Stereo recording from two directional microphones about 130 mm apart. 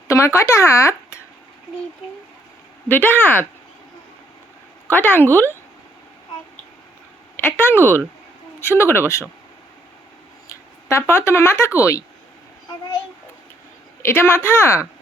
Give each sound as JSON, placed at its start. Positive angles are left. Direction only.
{"t": 0.1, "sound": "speech", "side_deg": 20}
{"t": 2.9, "sound": "speech", "side_deg": 15}
{"t": 4.9, "sound": "speech", "side_deg": 15}
{"t": 7.3, "sound": "speech", "side_deg": 15}
{"t": 10.5, "sound": "speech", "side_deg": 20}
{"t": 14.0, "sound": "speech", "side_deg": 20}